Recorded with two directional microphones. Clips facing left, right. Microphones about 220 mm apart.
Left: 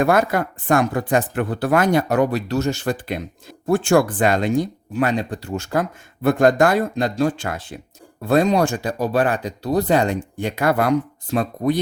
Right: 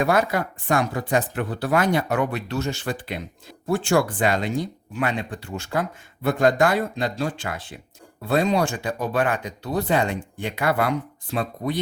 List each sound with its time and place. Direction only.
0.0 s speech: 50° left (ahead or behind)